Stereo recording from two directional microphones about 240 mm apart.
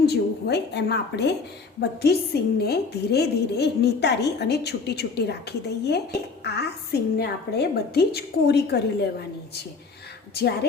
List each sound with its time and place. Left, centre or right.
0.0 s a woman's voice: left
10.3 s a woman's voice: left